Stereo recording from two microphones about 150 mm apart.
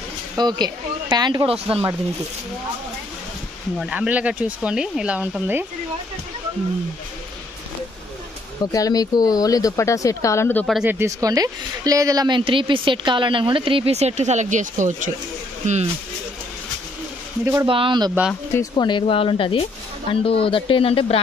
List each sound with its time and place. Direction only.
0.4 s speech: 30° right (ahead or behind)
3.7 s speech: 5° right (ahead or behind)
8.7 s speech: 25° left (ahead or behind)
10.9 s a woman's voice: 20° right (ahead or behind); by 15.9 s 50° right (ahead or behind)
17.6 s a woman's voice: 35° right (ahead or behind)
18.6 s speech: 30° left (ahead or behind)